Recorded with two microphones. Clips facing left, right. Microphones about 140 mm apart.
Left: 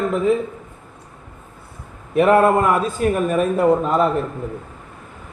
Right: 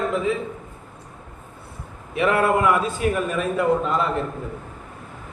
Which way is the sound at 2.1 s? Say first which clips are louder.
Left 6 dB; 45° left (ahead or behind).